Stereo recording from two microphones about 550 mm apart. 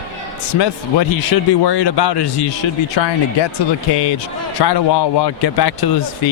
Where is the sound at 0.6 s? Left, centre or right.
Left.